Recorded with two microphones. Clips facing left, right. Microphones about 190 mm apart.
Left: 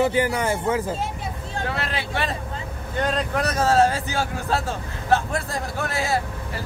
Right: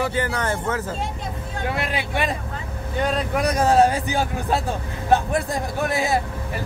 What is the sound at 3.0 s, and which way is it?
A man's voice, 10° right (ahead or behind).